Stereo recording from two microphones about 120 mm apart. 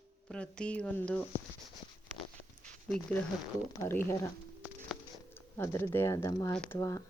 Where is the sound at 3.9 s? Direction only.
20° left (ahead or behind).